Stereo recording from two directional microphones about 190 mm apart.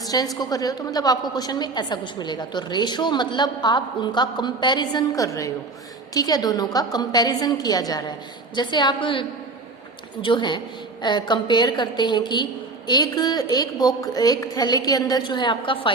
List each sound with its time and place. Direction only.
0.3 s a woman's voice: 20° left (ahead or behind)